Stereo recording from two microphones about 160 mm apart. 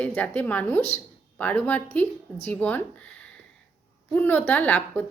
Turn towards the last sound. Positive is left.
turn(degrees=10)  # may be behind; listen again after turning